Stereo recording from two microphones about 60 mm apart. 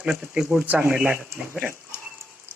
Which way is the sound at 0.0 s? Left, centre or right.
Centre.